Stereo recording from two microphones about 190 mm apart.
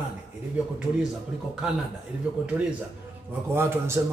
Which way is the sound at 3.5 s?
15° right (ahead or behind).